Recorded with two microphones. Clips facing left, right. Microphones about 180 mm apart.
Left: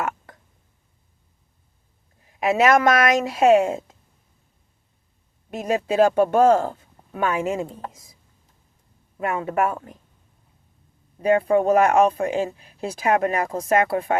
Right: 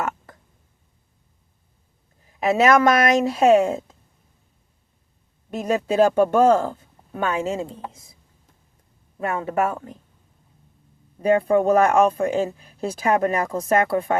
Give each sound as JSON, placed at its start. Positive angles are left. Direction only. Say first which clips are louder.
{"t": 2.4, "sound": "speech", "louder": "right 1 dB", "side_deg": -35}
{"t": 5.6, "sound": "speech", "louder": "even", "side_deg": -40}
{"t": 9.2, "sound": "speech", "louder": "even", "side_deg": -30}
{"t": 11.4, "sound": "speech", "louder": "even", "side_deg": -40}